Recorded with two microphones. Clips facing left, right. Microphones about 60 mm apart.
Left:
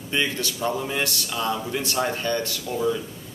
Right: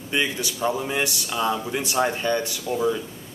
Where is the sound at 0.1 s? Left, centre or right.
Centre.